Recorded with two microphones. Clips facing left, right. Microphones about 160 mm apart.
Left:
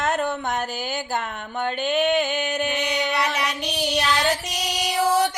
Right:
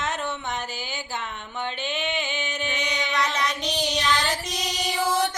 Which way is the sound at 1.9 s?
50° left (ahead or behind).